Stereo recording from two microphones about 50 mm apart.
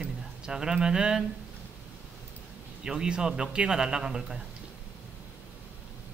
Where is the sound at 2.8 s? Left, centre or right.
Centre.